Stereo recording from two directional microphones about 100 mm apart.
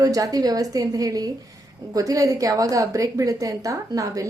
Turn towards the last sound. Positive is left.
turn(degrees=-35)  # may be behind; listen again after turning